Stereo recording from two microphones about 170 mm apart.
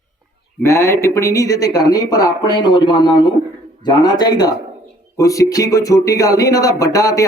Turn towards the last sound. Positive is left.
turn(degrees=20)  # may be behind; listen again after turning